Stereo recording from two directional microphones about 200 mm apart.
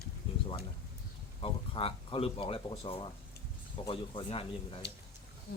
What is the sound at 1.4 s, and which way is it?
Speech, 25° left (ahead or behind).